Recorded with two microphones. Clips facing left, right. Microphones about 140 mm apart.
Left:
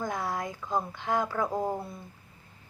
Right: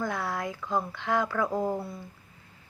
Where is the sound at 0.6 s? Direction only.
15° left (ahead or behind).